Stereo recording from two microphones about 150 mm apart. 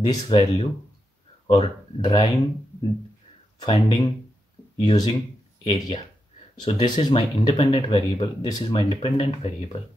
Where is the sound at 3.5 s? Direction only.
30° left (ahead or behind).